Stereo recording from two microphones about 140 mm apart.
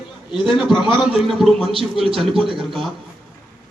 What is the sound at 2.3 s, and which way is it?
Speech, 40° right (ahead or behind).